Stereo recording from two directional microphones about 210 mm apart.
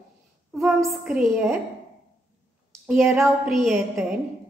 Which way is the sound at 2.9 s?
Centre (ahead or behind).